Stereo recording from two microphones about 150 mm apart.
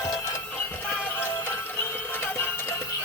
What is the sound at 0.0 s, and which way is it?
Music, 20° left (ahead or behind).